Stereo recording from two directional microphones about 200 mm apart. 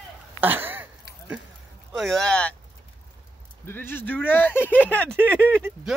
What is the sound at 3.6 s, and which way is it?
Speech, 10° left (ahead or behind).